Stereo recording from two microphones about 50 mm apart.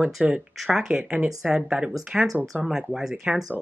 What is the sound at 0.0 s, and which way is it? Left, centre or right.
Speech, right.